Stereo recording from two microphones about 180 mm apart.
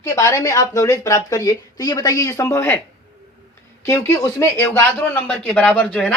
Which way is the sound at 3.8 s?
15° left (ahead or behind).